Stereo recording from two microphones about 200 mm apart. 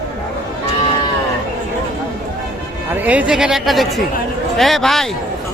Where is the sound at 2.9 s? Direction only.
5° right (ahead or behind).